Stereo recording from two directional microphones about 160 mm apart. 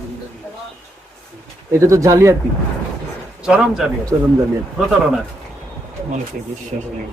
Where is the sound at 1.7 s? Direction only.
20° right (ahead or behind).